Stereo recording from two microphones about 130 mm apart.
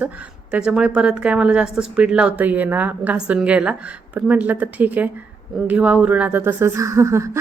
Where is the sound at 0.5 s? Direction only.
5° right (ahead or behind).